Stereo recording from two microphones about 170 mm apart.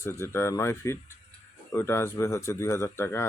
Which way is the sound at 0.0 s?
15° left (ahead or behind).